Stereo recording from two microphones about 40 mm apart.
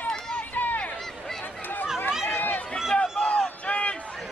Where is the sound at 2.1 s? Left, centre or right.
Centre.